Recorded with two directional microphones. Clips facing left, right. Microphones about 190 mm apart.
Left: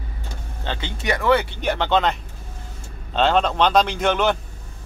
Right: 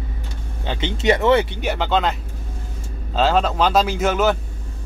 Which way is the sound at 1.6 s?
5° right (ahead or behind).